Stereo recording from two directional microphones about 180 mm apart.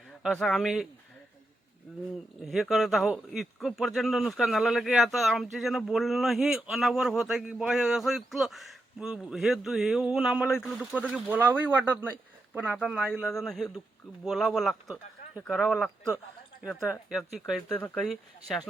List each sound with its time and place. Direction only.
0.2 s speech: centre (ahead or behind)
2.4 s speech: centre (ahead or behind)